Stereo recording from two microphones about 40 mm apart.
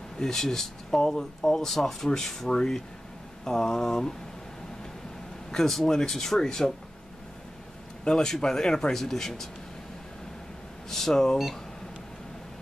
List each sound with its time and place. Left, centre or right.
0.2 s speech: centre
5.5 s speech: centre
8.0 s speech: centre
10.9 s speech: centre